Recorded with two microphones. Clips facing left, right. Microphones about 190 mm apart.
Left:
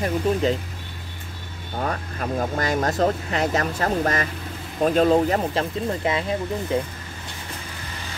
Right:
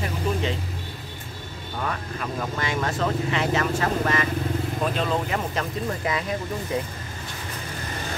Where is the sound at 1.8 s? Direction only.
40° left (ahead or behind).